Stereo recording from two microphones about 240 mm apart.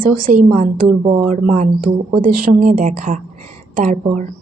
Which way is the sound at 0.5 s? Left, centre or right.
Right.